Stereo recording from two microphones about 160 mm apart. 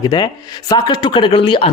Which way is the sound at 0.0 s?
25° left (ahead or behind).